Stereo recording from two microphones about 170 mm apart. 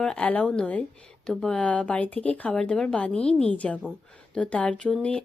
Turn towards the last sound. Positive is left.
turn(degrees=5)  # may be behind; listen again after turning